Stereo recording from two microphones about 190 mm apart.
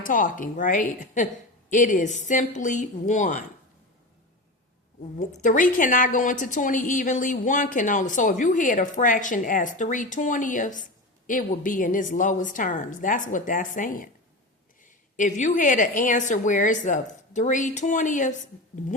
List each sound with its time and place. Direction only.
0.0 s a woman's voice: 45° left (ahead or behind)
5.1 s a woman's voice: 40° left (ahead or behind)